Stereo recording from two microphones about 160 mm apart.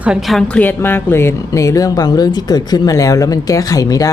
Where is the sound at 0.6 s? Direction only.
15° left (ahead or behind).